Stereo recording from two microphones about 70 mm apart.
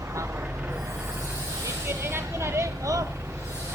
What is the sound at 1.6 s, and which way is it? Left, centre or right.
Speech, right.